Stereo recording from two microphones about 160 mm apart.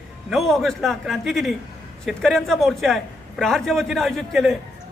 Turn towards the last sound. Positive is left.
turn(degrees=0)  # may be behind; listen again after turning